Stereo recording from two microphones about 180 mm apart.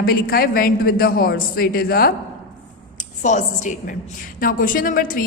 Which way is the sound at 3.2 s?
45° left (ahead or behind).